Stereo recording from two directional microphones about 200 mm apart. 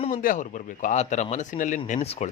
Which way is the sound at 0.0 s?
40° left (ahead or behind).